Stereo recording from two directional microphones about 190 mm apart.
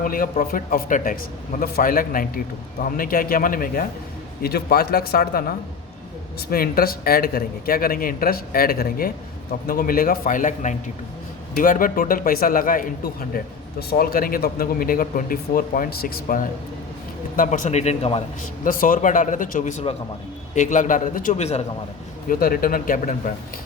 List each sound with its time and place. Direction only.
0.0 s a man's voice: 45° left (ahead or behind)
18.6 s speech: 45° left (ahead or behind)
22.3 s speech: 50° left (ahead or behind)